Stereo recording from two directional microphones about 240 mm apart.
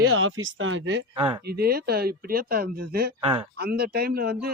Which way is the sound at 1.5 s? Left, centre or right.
Right.